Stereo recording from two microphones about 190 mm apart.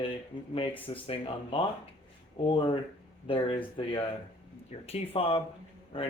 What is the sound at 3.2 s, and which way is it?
Speech, 30° left (ahead or behind).